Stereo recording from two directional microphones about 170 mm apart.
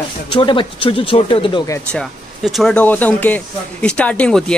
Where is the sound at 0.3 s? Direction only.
30° left (ahead or behind).